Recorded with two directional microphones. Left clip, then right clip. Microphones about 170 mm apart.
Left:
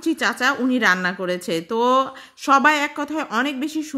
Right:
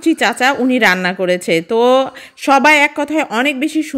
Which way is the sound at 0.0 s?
25° right (ahead or behind).